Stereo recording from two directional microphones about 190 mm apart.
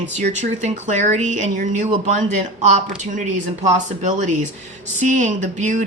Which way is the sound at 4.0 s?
40° right (ahead or behind).